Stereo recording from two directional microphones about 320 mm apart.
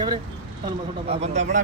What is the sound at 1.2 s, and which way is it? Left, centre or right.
Speech, right.